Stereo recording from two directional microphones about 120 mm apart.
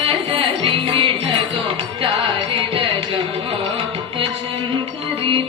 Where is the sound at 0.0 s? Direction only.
50° right (ahead or behind).